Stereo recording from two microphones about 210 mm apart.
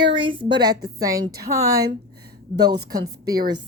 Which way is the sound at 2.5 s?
50° right (ahead or behind).